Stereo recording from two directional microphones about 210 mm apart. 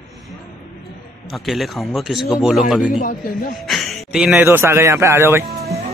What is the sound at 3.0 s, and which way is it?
Speech, 45° left (ahead or behind).